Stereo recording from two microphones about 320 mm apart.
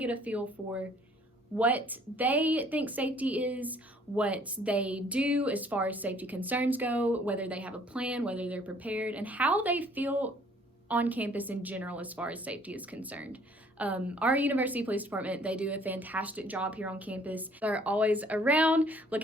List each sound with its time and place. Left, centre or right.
0.0 s a woman's voice: centre